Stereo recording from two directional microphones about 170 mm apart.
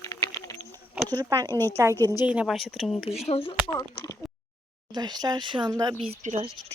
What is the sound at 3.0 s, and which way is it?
Speech, 35° left (ahead or behind).